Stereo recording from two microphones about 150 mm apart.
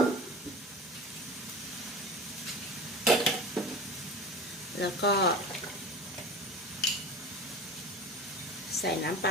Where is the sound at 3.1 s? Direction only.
Centre (ahead or behind).